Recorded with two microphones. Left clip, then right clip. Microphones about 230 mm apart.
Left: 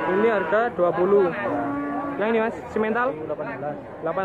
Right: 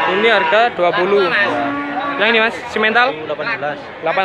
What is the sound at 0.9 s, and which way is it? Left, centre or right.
Speech, right.